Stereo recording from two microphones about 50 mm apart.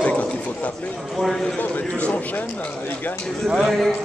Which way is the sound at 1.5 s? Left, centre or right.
Left.